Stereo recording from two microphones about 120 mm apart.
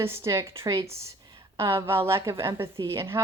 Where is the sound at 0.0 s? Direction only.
20° right (ahead or behind).